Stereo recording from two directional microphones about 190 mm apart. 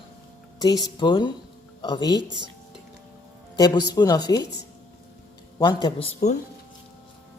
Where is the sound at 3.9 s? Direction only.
20° left (ahead or behind).